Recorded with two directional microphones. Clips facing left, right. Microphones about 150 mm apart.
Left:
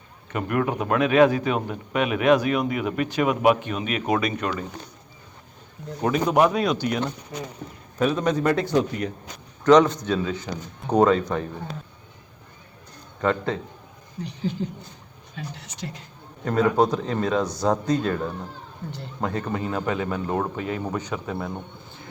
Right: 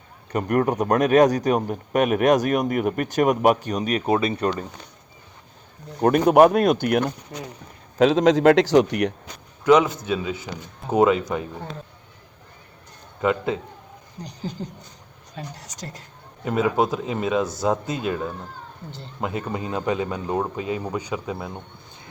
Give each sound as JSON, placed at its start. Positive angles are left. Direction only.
{"t": 0.3, "sound": "a man's voice", "side_deg": -45}
{"t": 6.0, "sound": "speech", "side_deg": -55}
{"t": 7.9, "sound": "a man's voice", "side_deg": -90}
{"t": 9.6, "sound": "a man's voice", "side_deg": -5}
{"t": 13.2, "sound": "a man's voice", "side_deg": -10}
{"t": 14.2, "sound": "speech", "side_deg": -40}
{"t": 16.4, "sound": "a man's voice", "side_deg": -10}